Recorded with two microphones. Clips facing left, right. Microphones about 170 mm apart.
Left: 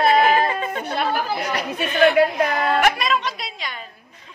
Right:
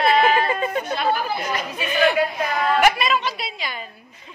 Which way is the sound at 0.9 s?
65° left (ahead or behind).